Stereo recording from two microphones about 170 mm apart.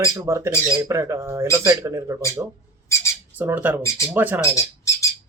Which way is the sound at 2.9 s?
15° left (ahead or behind).